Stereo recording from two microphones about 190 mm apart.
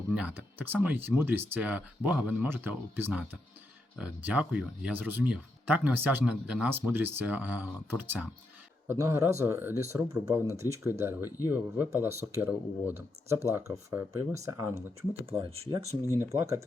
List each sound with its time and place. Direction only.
0.1 s speech: 10° right (ahead or behind)
11.3 s speech: 20° left (ahead or behind)
11.5 s speech: 10° right (ahead or behind)
15.3 s speech: 30° right (ahead or behind)
16.0 s speech: 15° left (ahead or behind)
16.4 s speech: 15° right (ahead or behind)